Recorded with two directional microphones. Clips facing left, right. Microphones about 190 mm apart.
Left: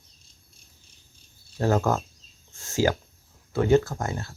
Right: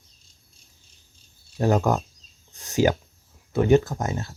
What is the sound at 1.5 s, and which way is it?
Speech, 15° right (ahead or behind).